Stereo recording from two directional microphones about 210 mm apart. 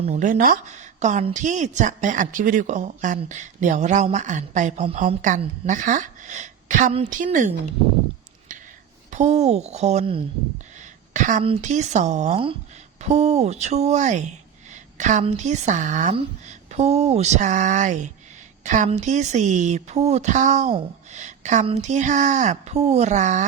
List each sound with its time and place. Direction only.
0.0 s a woman's voice: 35° right (ahead or behind)
9.0 s a woman's voice: 35° right (ahead or behind)